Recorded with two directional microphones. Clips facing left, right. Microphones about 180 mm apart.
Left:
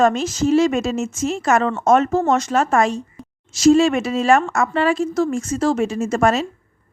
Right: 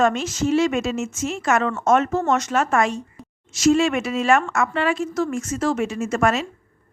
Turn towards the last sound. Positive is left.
turn(degrees=35)  # may be behind; listen again after turning